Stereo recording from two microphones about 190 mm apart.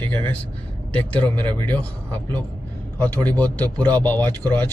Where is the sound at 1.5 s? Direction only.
10° left (ahead or behind).